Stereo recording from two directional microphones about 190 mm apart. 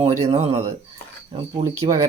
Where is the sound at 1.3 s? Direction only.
30° right (ahead or behind).